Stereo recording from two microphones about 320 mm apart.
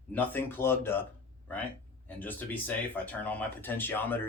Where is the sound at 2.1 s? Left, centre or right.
Centre.